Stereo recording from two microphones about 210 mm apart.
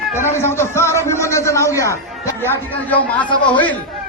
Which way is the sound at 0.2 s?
10° left (ahead or behind).